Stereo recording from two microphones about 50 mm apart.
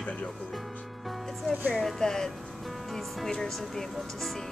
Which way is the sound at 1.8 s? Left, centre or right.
Centre.